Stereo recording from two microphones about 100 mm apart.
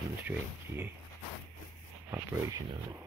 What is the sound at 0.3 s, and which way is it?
Speech, 20° right (ahead or behind).